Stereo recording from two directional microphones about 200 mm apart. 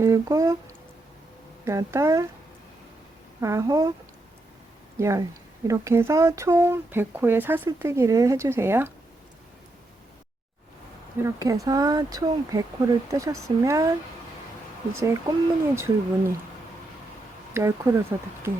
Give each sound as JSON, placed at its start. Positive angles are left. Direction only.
{"t": 0.0, "sound": "speech", "side_deg": -15}
{"t": 1.6, "sound": "speech", "side_deg": -15}
{"t": 3.4, "sound": "speech", "side_deg": -15}
{"t": 4.9, "sound": "speech", "side_deg": -15}
{"t": 11.2, "sound": "speech", "side_deg": -15}
{"t": 14.9, "sound": "speech", "side_deg": -15}
{"t": 17.5, "sound": "speech", "side_deg": -15}